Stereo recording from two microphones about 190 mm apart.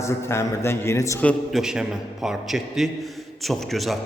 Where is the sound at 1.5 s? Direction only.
5° right (ahead or behind).